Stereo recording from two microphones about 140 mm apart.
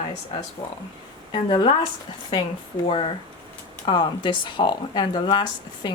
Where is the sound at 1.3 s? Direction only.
35° left (ahead or behind).